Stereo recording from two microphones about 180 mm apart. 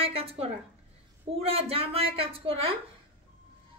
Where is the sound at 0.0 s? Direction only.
35° right (ahead or behind).